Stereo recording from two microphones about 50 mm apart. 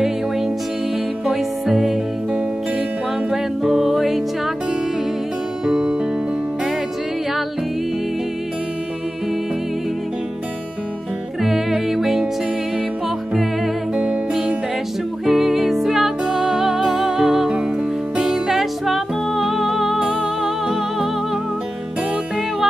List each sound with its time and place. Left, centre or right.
1.2 s music: centre
3.3 s music: centre
5.7 s music: centre
11.4 s music: centre
13.9 s music: centre